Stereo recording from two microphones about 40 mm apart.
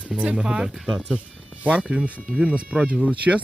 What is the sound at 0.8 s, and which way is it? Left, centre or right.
Speech, centre.